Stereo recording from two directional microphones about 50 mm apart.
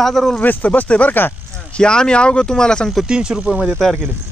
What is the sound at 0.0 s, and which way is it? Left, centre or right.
Speech, centre.